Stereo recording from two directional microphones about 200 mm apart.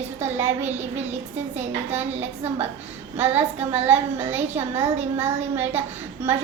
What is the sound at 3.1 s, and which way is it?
A woman's voice, 10° right (ahead or behind).